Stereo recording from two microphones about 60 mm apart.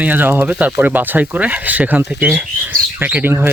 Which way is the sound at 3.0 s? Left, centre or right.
Right.